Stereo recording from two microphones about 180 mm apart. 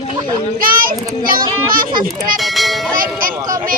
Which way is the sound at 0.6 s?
55° right (ahead or behind).